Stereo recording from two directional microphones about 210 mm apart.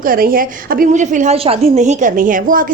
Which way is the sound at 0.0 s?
40° right (ahead or behind).